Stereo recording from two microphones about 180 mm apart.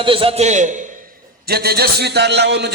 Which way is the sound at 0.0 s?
30° right (ahead or behind).